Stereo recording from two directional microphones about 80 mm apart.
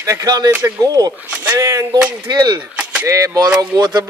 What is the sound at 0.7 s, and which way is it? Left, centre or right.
Speech, right.